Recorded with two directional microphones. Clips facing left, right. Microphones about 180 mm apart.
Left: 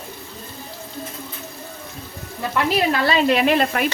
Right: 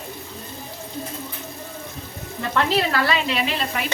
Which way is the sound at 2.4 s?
15° left (ahead or behind).